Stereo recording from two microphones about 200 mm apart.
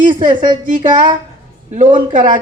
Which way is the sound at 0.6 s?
40° right (ahead or behind).